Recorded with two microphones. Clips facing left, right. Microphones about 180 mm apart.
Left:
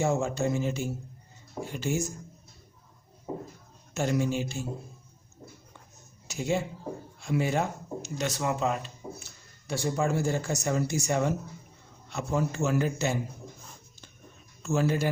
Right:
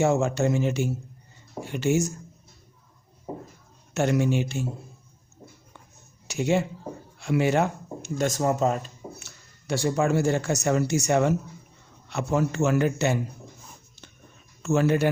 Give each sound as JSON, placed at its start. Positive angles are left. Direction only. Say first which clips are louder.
{"t": 0.0, "sound": "a man's voice", "louder": "right 5 dB", "side_deg": -75}
{"t": 3.9, "sound": "a man's voice", "louder": "right 4 dB", "side_deg": -70}
{"t": 6.2, "sound": "speech", "louder": "right 5 dB", "side_deg": -75}
{"t": 8.2, "sound": "speech", "louder": "right 6 dB", "side_deg": -45}
{"t": 9.1, "sound": "a man's voice", "louder": "even", "side_deg": -70}
{"t": 14.6, "sound": "speech", "louder": "right 5 dB", "side_deg": -70}